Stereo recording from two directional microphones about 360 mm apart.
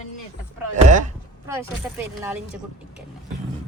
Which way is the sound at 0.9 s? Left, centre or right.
Centre.